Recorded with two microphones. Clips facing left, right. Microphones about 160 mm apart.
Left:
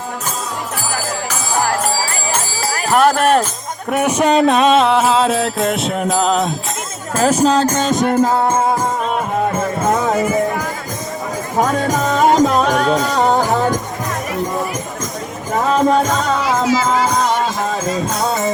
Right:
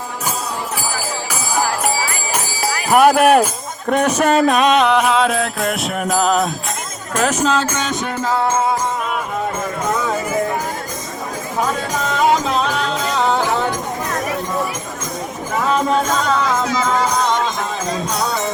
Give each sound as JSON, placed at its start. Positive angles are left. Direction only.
{"t": 2.9, "sound": "speech", "side_deg": -10}
{"t": 3.8, "sound": "music", "side_deg": 10}
{"t": 11.6, "sound": "music", "side_deg": 45}
{"t": 15.6, "sound": "music", "side_deg": 40}
{"t": 16.4, "sound": "music", "side_deg": 5}